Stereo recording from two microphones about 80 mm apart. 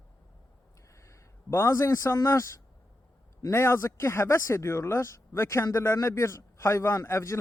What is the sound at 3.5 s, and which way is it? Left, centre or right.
Speech, left.